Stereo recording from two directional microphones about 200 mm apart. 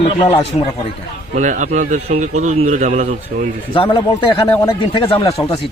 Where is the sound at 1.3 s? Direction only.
40° right (ahead or behind).